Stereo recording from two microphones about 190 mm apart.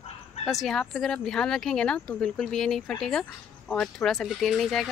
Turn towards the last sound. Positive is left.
turn(degrees=0)  # may be behind; listen again after turning